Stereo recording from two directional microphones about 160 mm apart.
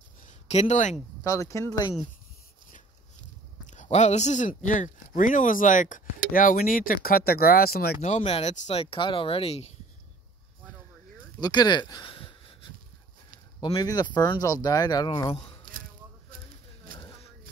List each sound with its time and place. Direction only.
0.3 s speech: 45° left (ahead or behind)
1.2 s speech: 20° left (ahead or behind)
3.6 s speech: 50° left (ahead or behind); by 8.0 s 75° left (ahead or behind)
8.0 s speech: 40° left (ahead or behind)
11.3 s speech: 25° left (ahead or behind)
13.7 s speech: 25° left (ahead or behind)